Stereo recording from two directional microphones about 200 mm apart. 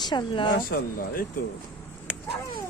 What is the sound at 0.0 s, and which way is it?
Speech, 20° left (ahead or behind).